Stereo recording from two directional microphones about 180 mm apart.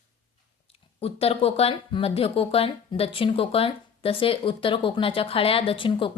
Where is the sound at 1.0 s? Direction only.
35° left (ahead or behind).